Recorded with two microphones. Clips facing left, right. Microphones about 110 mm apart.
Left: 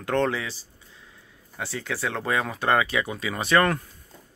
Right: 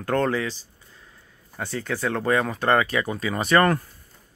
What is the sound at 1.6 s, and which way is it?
Speech, centre (ahead or behind).